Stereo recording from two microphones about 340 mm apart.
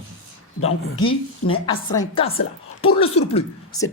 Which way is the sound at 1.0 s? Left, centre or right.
Centre.